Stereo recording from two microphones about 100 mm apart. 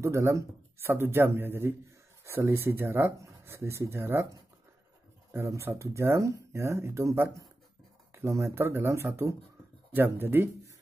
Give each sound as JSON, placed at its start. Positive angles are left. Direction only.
{"t": 0.0, "sound": "speech", "side_deg": -30}